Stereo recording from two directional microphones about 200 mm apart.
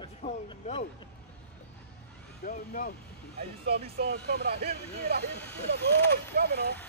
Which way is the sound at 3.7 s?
50° right (ahead or behind).